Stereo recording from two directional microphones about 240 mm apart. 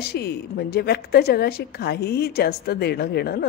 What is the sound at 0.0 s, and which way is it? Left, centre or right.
A woman's voice, left.